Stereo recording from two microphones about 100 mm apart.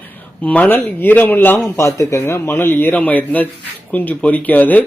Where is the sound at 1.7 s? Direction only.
30° left (ahead or behind).